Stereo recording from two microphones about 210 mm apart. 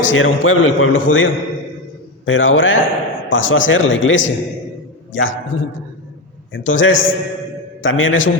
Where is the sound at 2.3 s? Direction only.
65° left (ahead or behind).